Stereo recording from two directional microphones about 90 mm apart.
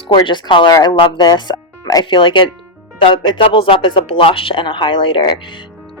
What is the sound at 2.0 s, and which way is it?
Speech, 65° left (ahead or behind).